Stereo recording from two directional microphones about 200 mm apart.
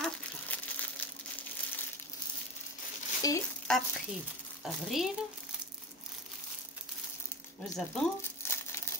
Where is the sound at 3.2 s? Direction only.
15° left (ahead or behind).